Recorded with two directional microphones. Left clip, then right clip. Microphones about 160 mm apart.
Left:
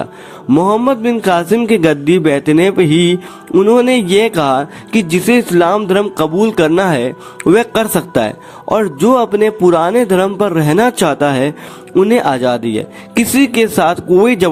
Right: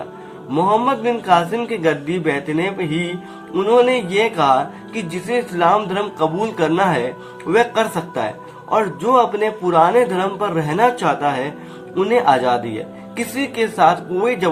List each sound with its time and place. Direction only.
0.5 s a man's voice: 45° left (ahead or behind)
1.2 s music: 60° left (ahead or behind)
3.5 s a man's voice: 45° left (ahead or behind)
3.8 s speech: 65° left (ahead or behind)